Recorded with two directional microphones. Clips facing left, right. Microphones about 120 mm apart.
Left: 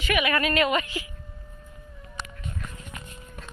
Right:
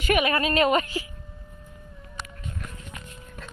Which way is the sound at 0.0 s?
40° right (ahead or behind).